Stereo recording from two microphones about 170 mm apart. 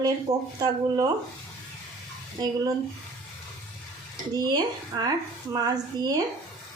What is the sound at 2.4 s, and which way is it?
Speech, 25° right (ahead or behind).